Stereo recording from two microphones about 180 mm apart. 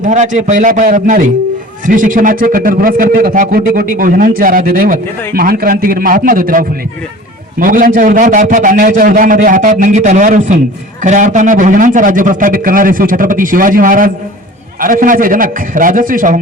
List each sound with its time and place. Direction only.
0.0 s a man's voice: 45° right (ahead or behind)